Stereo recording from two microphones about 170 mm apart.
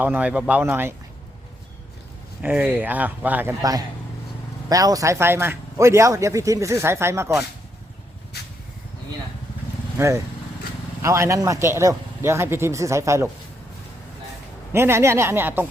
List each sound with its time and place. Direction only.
0.0 s speech: 10° right (ahead or behind)
2.4 s speech: 10° right (ahead or behind)
3.6 s a man's voice: 20° right (ahead or behind)
11.0 s speech: 15° right (ahead or behind)
14.7 s speech: 15° right (ahead or behind)